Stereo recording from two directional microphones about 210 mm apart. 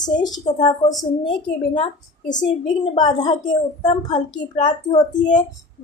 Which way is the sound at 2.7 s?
20° left (ahead or behind).